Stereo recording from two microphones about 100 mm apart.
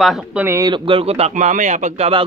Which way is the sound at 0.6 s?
55° right (ahead or behind).